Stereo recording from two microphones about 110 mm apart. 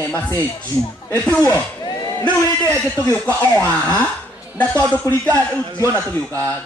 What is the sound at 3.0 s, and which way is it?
Speech, 15° left (ahead or behind).